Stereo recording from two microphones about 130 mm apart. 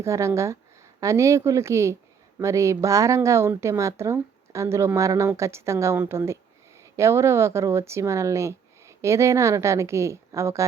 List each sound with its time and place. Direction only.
0.0 s speech: 20° right (ahead or behind)